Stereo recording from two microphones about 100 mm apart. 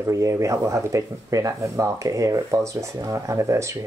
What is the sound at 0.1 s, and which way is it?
Speech, 30° right (ahead or behind).